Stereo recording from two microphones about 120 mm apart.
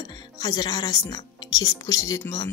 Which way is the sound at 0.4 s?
35° left (ahead or behind).